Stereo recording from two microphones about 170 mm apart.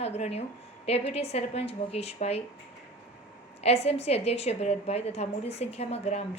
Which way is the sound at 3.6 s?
40° left (ahead or behind).